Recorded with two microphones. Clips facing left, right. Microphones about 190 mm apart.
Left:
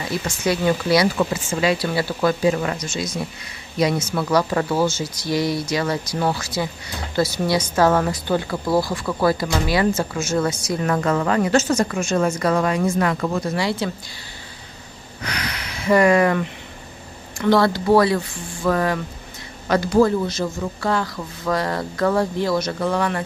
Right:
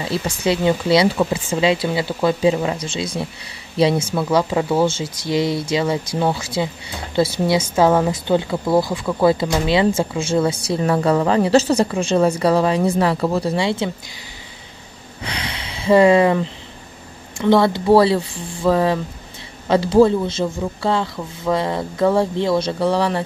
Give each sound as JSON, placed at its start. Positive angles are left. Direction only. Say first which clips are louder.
{"t": 0.4, "sound": "a woman's voice", "louder": "right 2 dB", "side_deg": -25}
{"t": 15.2, "sound": "a woman's voice", "louder": "right 1 dB", "side_deg": -25}